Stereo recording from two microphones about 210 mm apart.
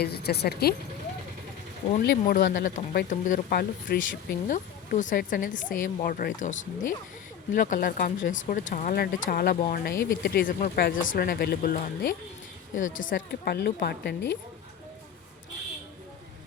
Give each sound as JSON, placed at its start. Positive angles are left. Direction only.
{"t": 0.0, "sound": "speech", "side_deg": 50}
{"t": 2.0, "sound": "speech", "side_deg": 45}